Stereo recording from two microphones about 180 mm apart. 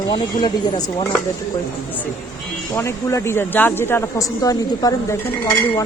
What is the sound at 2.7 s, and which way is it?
A woman's voice, 15° left (ahead or behind).